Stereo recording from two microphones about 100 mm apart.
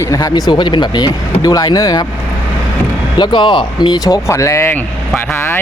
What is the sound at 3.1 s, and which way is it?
Speech, 50° left (ahead or behind).